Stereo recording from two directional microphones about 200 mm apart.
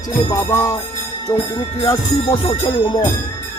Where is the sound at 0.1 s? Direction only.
20° left (ahead or behind).